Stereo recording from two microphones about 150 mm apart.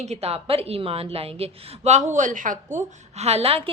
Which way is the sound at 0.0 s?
45° right (ahead or behind).